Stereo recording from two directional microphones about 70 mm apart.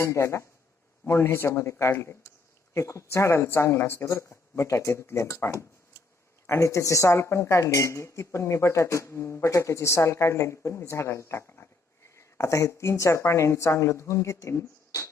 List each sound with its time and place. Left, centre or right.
0.0 s speech: left
12.1 s speech: left